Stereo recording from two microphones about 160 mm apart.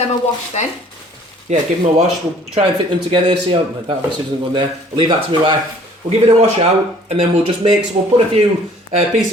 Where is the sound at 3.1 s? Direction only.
30° right (ahead or behind).